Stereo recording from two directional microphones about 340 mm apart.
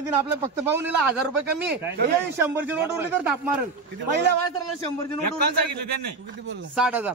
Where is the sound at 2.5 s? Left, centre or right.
Centre.